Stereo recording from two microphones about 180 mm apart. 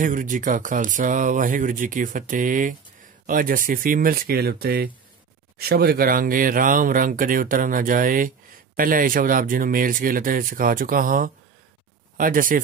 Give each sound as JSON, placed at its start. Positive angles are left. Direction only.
{"t": 0.0, "sound": "speech", "side_deg": -45}